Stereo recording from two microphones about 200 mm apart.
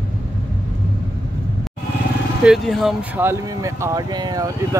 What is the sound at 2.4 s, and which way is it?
Speech, centre (ahead or behind).